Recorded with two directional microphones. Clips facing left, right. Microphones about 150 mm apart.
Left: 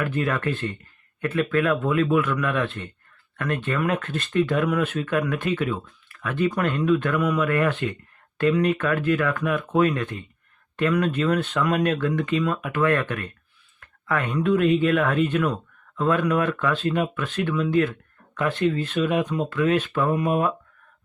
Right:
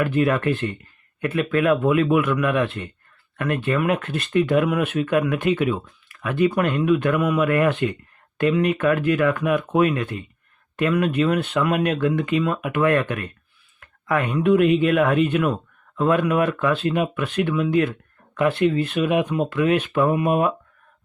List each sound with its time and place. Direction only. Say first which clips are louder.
0.0 s speech: right 5 dB; 15° right (ahead or behind)
13.7 s a sound: right 3 dB; 15° right (ahead or behind)
14.3 s speech: right 3 dB; 15° right (ahead or behind)